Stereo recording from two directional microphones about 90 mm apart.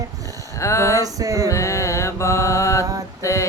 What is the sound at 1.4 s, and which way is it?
Mantra, 35° left (ahead or behind).